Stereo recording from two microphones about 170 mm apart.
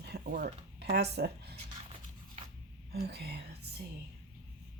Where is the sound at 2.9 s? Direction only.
65° right (ahead or behind).